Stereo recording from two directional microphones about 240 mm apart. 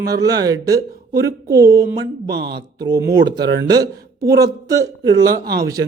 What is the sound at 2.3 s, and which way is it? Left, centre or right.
Speech, right.